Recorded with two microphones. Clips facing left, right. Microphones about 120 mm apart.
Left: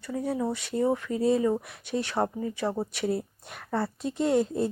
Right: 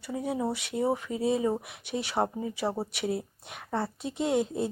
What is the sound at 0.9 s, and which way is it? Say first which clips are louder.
Speech: left 2 dB; 15° right (ahead or behind).